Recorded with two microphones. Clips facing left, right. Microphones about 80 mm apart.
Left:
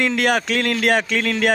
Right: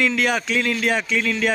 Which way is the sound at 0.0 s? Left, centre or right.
Left.